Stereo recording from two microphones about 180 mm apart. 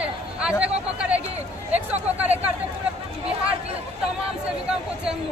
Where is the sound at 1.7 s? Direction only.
10° right (ahead or behind).